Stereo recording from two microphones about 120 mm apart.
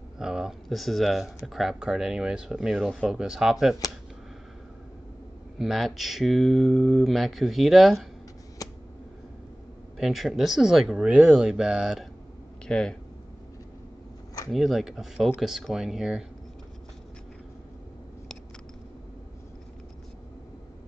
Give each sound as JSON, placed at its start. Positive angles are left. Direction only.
{"t": 0.2, "sound": "speech", "side_deg": -5}
{"t": 5.6, "sound": "speech", "side_deg": 0}
{"t": 8.6, "sound": "a sound", "side_deg": 30}
{"t": 9.9, "sound": "speech", "side_deg": 0}
{"t": 14.5, "sound": "speech", "side_deg": 0}